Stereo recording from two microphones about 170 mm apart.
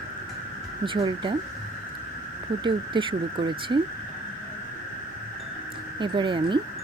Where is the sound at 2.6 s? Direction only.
30° right (ahead or behind).